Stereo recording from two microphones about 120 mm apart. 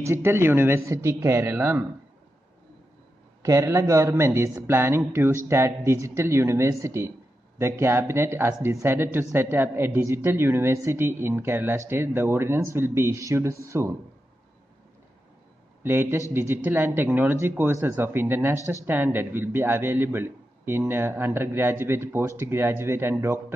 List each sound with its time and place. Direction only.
0.0 s a man's voice: 20° right (ahead or behind)
3.4 s a man's voice: 25° right (ahead or behind)
15.8 s a man's voice: 20° right (ahead or behind)